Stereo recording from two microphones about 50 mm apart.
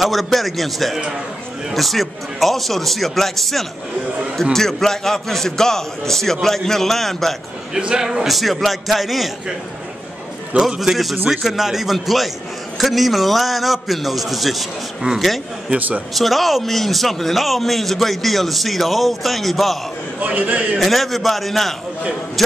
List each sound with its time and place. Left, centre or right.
0.0 s a man's voice: centre
7.7 s a man's voice: centre
8.4 s a man's voice: centre
10.8 s a man's voice: centre
20.2 s a man's voice: right
20.7 s a man's voice: centre